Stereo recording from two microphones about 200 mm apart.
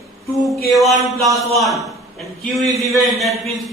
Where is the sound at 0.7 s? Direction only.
Centre (ahead or behind).